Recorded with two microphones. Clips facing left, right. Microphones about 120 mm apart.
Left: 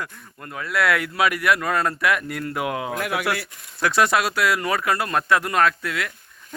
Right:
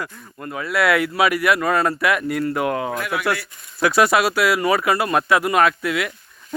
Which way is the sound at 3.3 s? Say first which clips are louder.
Left 2 dB; 75° left (ahead or behind).